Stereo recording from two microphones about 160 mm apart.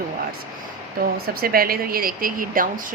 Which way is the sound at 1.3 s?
70° right (ahead or behind).